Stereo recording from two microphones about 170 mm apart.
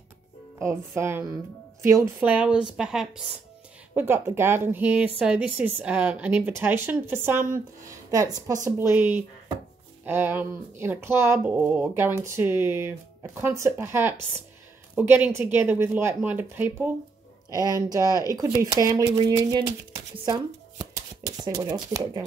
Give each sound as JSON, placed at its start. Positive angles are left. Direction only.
{"t": 0.6, "sound": "speech", "side_deg": -15}
{"t": 17.5, "sound": "speech", "side_deg": -20}